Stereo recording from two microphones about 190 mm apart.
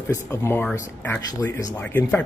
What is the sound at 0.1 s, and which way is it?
A man's voice, 15° left (ahead or behind).